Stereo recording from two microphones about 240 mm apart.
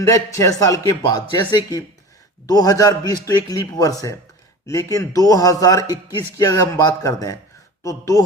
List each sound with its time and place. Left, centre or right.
0.0 s a man's voice: centre